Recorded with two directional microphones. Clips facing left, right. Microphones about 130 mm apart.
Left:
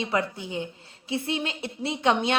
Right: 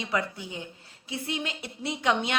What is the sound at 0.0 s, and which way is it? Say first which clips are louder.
A woman's voice: left 3 dB; 25° left (ahead or behind).